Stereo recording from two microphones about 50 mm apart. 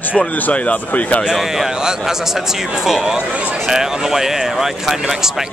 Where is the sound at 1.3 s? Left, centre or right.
Centre.